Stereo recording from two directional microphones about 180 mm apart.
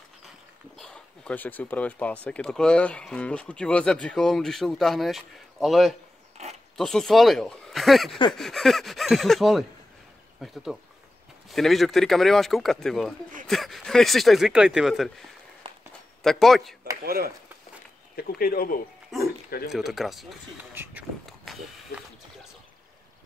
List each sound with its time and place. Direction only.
0.7 s speech: 5° left (ahead or behind)
16.2 s speech: centre (ahead or behind)
17.0 s speech: 55° right (ahead or behind)
18.1 s speech: 55° left (ahead or behind)
19.1 s dog: centre (ahead or behind)
19.7 s speech: centre (ahead or behind)
20.7 s speech: 10° right (ahead or behind)
21.3 s a sound: centre (ahead or behind)